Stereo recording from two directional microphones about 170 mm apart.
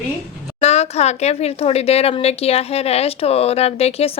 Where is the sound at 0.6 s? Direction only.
40° left (ahead or behind).